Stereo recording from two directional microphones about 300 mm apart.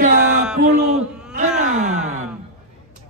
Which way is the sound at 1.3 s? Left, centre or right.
Right.